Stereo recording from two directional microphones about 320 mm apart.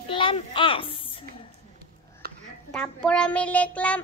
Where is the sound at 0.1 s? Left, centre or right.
Centre.